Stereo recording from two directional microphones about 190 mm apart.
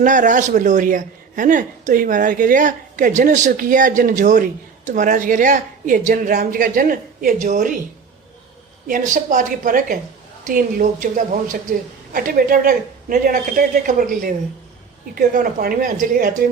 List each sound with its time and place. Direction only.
0.0 s a woman's voice: 40° right (ahead or behind)
8.9 s a woman's voice: 40° right (ahead or behind)